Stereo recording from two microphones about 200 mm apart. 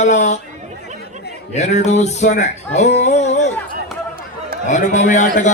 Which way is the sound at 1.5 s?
35° left (ahead or behind).